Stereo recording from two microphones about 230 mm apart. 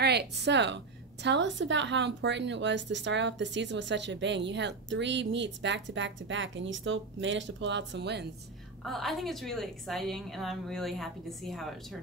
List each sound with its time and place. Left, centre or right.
0.0 s speech: right
8.8 s a woman's voice: centre